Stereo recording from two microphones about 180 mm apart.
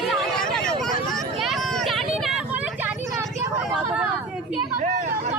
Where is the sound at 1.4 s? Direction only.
Centre (ahead or behind).